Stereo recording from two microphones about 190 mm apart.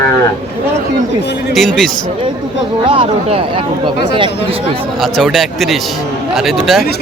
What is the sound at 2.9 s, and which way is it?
Speech, 30° right (ahead or behind).